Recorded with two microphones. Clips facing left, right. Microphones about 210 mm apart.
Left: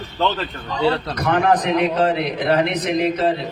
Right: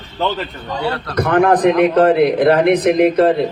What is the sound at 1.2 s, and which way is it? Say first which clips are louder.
A man's voice: right 9 dB; 50° right (ahead or behind).